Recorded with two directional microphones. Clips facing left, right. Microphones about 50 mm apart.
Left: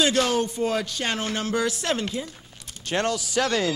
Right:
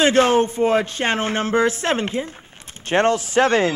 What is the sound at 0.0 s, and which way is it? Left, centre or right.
Speech, right.